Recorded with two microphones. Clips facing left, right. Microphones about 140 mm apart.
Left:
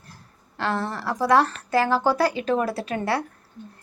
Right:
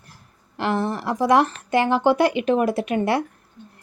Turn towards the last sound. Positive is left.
turn(degrees=-25)  # may be behind; listen again after turning